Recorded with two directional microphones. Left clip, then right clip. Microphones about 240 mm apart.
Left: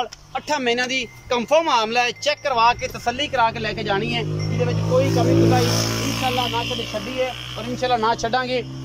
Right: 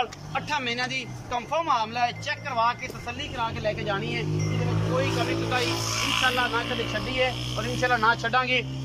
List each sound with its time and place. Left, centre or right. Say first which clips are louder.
0.0 s speech: left 2 dB; left
4.9 s speech: left 9 dB; left
5.6 s speech: left 5 dB; left; by 8.6 s centre